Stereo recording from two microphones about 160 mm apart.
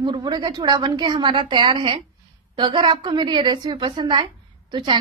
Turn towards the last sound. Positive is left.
turn(degrees=-30)  # may be behind; listen again after turning